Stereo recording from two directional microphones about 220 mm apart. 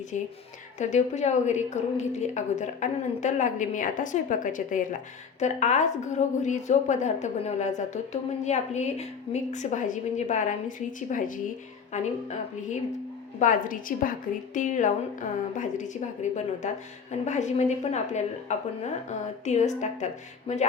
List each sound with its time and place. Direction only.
0.8 s a woman's voice: 35° left (ahead or behind)